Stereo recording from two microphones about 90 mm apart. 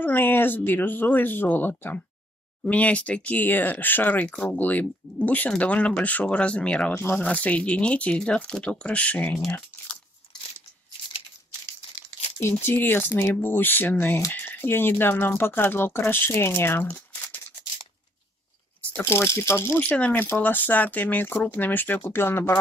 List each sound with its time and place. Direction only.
0.0 s speech: 25° left (ahead or behind)
6.9 s speech: 25° left (ahead or behind)
11.8 s crumpling: 90° left
12.4 s speech: 30° left (ahead or behind)
19.0 s speech: 30° left (ahead or behind)
19.8 s speech: 20° left (ahead or behind)